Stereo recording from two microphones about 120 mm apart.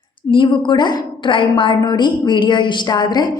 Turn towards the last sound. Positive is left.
turn(degrees=35)  # may be behind; listen again after turning